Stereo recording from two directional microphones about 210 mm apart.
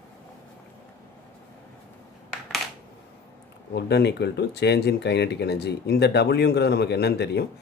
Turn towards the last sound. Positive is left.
turn(degrees=50)  # may be behind; listen again after turning